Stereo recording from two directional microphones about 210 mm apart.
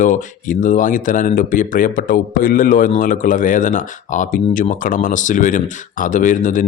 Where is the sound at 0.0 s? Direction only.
35° left (ahead or behind).